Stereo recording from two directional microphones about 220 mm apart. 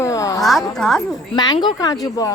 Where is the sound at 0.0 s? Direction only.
15° left (ahead or behind).